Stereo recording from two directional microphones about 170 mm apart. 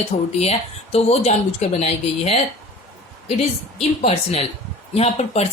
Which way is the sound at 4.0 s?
40° left (ahead or behind).